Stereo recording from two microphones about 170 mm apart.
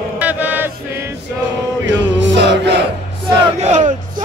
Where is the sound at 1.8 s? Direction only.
90° right.